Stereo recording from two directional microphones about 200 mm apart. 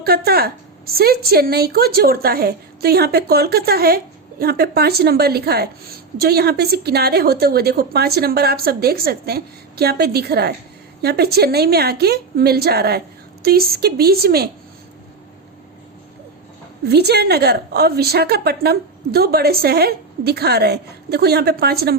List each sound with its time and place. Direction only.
0.0 s a woman's voice: 50° right (ahead or behind)
16.8 s a woman's voice: 55° right (ahead or behind)